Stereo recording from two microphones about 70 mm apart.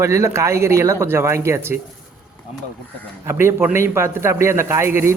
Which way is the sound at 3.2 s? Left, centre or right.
Right.